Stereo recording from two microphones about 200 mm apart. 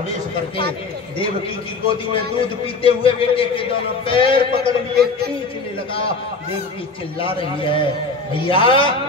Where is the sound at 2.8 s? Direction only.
25° left (ahead or behind).